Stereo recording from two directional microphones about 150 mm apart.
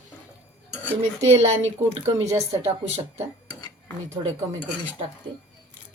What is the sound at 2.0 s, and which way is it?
Speech, 20° right (ahead or behind).